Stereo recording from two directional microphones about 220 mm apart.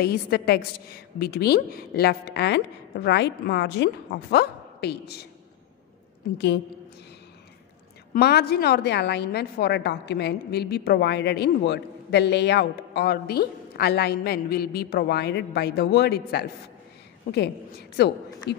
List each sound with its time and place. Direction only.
0.0 s a woman's voice: 45° left (ahead or behind)
6.3 s a woman's voice: 50° left (ahead or behind)
8.1 s a woman's voice: 45° left (ahead or behind)